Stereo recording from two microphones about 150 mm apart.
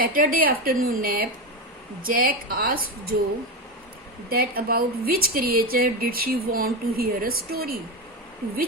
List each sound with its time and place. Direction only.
0.0 s speech: 70° right (ahead or behind)
4.3 s speech: 80° right